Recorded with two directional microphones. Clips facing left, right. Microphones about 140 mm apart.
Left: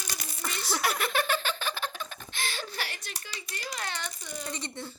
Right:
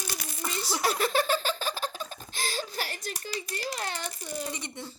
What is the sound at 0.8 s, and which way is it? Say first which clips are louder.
Giggle: right 3 dB; 35° right (ahead or behind).